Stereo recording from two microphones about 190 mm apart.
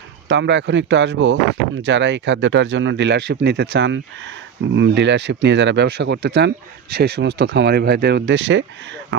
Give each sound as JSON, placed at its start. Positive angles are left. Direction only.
{"t": 0.3, "sound": "speech", "side_deg": -70}